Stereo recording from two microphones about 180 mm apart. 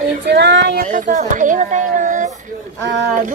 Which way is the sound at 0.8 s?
45° right (ahead or behind).